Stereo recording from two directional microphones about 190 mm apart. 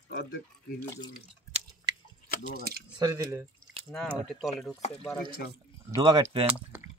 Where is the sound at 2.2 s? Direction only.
45° left (ahead or behind).